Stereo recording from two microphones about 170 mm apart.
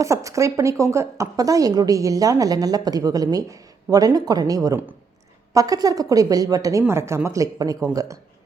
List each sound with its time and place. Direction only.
0.0 s a woman's voice: 20° right (ahead or behind)